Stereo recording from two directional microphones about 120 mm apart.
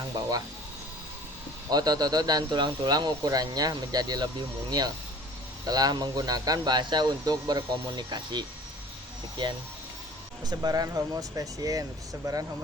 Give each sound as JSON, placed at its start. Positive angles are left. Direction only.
{"t": 1.7, "sound": "speech", "side_deg": -35}
{"t": 5.6, "sound": "speech", "side_deg": -35}